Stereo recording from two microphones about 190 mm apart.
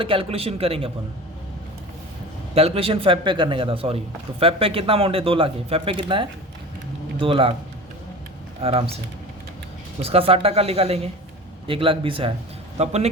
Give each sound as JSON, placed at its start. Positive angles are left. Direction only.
{"t": 0.0, "sound": "speech", "side_deg": -30}
{"t": 2.6, "sound": "speech", "side_deg": -30}
{"t": 8.6, "sound": "speech", "side_deg": -30}
{"t": 10.0, "sound": "speech", "side_deg": -30}